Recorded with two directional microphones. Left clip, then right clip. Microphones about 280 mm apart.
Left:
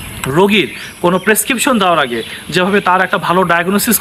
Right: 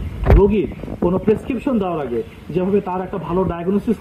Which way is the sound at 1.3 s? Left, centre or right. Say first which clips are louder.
Left 6 dB; left.